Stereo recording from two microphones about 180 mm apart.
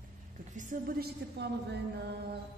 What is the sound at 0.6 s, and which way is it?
A woman's voice, 50° right (ahead or behind).